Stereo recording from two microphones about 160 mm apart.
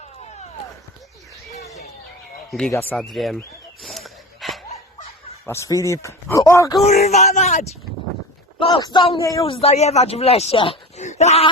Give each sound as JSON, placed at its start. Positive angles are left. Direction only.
{"t": 2.5, "sound": "speech", "side_deg": 5}
{"t": 2.9, "sound": "a sound", "side_deg": 0}
{"t": 4.7, "sound": "snicker", "side_deg": 40}
{"t": 5.5, "sound": "speech", "side_deg": 20}
{"t": 6.8, "sound": "speech", "side_deg": 45}
{"t": 8.5, "sound": "speech", "side_deg": 30}
{"t": 9.4, "sound": "speech", "side_deg": 35}